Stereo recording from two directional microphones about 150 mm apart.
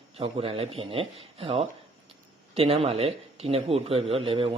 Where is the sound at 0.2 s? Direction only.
35° right (ahead or behind).